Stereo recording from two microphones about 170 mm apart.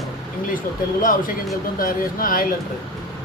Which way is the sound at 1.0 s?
55° left (ahead or behind).